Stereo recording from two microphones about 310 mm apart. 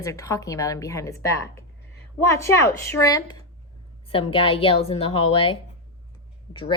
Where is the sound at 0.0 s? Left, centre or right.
Centre.